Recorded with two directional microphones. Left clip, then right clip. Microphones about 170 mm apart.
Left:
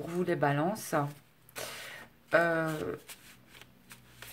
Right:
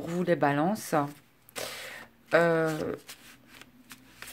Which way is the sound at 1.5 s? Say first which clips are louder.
Right 4 dB; 45° right (ahead or behind).